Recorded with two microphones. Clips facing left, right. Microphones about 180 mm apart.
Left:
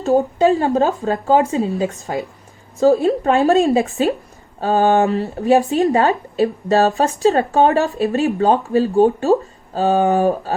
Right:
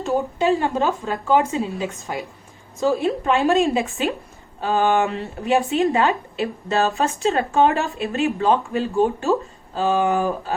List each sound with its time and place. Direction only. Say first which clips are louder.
0.0 s speech: left 6 dB; 40° left (ahead or behind)